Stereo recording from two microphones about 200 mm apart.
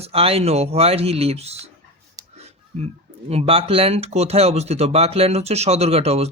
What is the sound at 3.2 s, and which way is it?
Speech, 30° right (ahead or behind).